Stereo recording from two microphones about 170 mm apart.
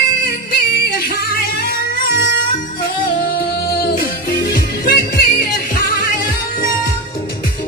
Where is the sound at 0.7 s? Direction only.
65° left (ahead or behind).